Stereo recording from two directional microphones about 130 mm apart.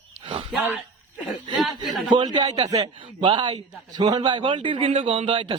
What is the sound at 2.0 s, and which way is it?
A man's voice, 35° right (ahead or behind).